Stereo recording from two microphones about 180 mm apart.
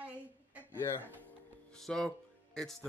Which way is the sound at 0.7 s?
10° left (ahead or behind).